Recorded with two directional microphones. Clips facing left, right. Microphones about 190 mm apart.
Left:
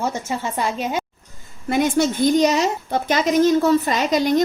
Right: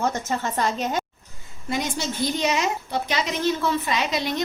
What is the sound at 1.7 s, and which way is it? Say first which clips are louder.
Speech: left 9 dB; 55° left (ahead or behind).